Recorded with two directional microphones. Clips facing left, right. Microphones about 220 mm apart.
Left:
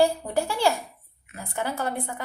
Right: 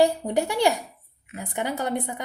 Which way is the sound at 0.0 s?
20° right (ahead or behind).